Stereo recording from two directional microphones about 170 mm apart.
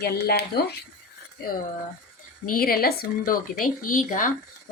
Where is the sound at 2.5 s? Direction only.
60° left (ahead or behind).